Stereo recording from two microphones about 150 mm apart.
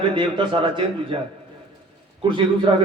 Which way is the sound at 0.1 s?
35° right (ahead or behind).